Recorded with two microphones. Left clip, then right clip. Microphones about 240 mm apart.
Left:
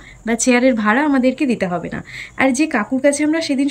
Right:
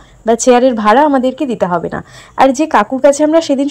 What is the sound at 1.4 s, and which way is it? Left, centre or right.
Speech, right.